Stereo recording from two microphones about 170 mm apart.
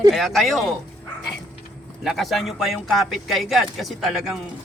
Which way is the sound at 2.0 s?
Centre (ahead or behind).